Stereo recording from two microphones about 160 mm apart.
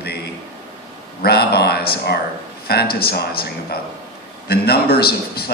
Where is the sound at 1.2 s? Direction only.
80° left.